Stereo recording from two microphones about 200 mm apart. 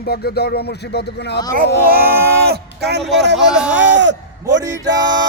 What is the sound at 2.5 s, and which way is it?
A man's voice, 55° right (ahead or behind).